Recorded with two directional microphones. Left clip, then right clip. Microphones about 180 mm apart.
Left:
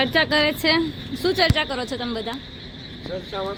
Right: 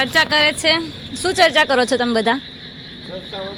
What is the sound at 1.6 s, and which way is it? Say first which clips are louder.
Speech: right 10 dB; 30° right (ahead or behind).